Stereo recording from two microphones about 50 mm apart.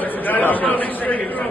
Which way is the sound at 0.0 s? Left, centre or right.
Left.